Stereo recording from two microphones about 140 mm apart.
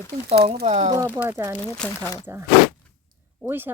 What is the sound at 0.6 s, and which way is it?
Speech, 55° right (ahead or behind).